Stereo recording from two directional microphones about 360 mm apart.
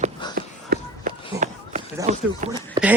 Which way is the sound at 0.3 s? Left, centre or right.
Right.